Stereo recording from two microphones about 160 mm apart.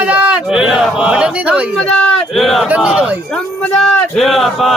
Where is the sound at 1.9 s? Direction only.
5° left (ahead or behind).